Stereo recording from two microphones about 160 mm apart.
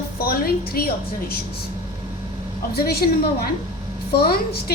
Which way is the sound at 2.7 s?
75° left (ahead or behind).